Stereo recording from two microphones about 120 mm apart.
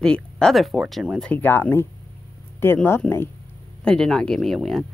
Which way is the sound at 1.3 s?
15° left (ahead or behind).